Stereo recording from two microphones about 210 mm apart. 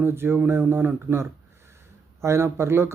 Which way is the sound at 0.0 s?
10° right (ahead or behind).